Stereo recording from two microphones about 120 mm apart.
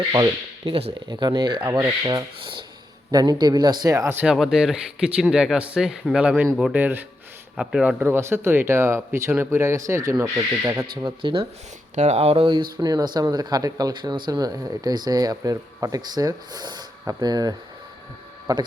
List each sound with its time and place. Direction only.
0.6 s speech: 50° right (ahead or behind)
1.0 s speech: 35° right (ahead or behind)
1.8 s speech: 30° right (ahead or behind)
2.4 s a sound: 40° right (ahead or behind)
3.1 s speech: 35° right (ahead or behind)
4.2 s speech: 5° right (ahead or behind)
7.9 s speech: 20° right (ahead or behind)
10.9 s speech: 40° right (ahead or behind)
11.9 s speech: 70° right (ahead or behind); by 18.6 s 30° right (ahead or behind)